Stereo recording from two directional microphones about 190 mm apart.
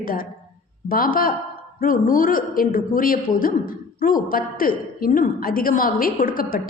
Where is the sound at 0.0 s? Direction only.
50° left (ahead or behind).